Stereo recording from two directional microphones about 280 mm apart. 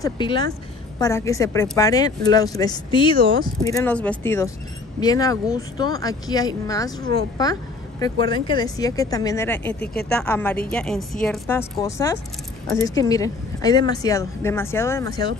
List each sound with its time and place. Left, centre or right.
0.0 s speech: centre